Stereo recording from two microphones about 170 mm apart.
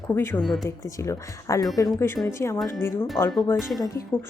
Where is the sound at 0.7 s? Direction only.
15° left (ahead or behind).